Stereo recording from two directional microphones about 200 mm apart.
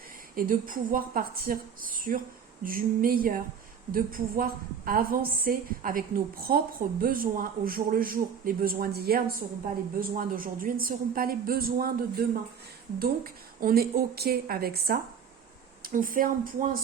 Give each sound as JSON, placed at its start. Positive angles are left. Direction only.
{"t": 0.3, "sound": "a woman's voice", "side_deg": -45}